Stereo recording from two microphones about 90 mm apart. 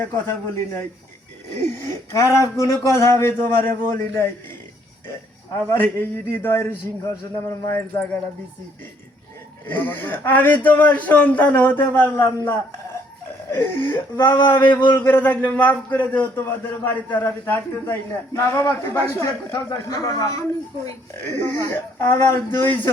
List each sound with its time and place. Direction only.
0.0 s speech: 25° left (ahead or behind)
5.6 s speech: 25° left (ahead or behind)
9.6 s speech: 20° left (ahead or behind)
19.9 s speech: 45° left (ahead or behind)
21.1 s speech: 25° left (ahead or behind)